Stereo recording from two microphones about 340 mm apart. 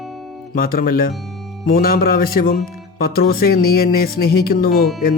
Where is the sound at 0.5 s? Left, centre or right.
Left.